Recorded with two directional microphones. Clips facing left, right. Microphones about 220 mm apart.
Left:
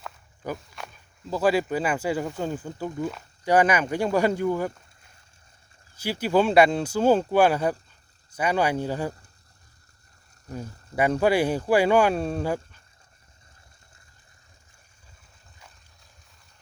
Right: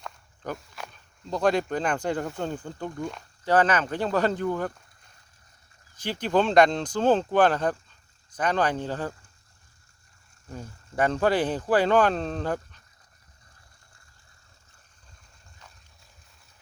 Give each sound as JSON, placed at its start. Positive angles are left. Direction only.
{"t": 0.0, "sound": "speech", "side_deg": 0}
{"t": 6.0, "sound": "speech", "side_deg": 10}
{"t": 10.5, "sound": "speech", "side_deg": 10}